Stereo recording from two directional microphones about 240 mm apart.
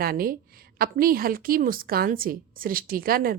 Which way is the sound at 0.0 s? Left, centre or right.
Right.